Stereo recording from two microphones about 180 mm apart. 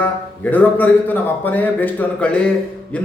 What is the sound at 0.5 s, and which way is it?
Speech, 10° left (ahead or behind).